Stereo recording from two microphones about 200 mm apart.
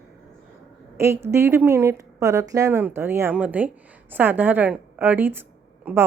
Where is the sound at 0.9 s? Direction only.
15° right (ahead or behind).